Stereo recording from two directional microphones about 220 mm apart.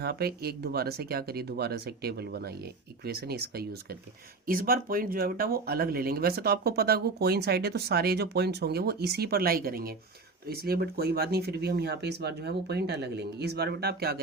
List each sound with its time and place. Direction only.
0.0 s speech: 45° right (ahead or behind)